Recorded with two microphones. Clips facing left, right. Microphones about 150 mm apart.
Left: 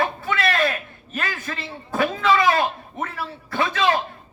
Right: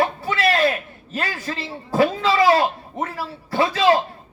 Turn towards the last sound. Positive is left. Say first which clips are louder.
# right 4 dB
turn(degrees=-30)  # may be behind; listen again after turning